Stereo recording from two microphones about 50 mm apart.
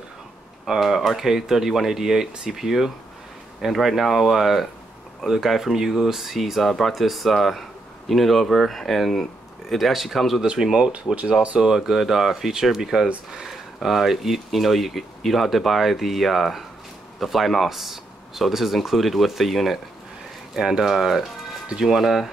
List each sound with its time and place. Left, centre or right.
0.7 s speech: centre
10.4 s speech: centre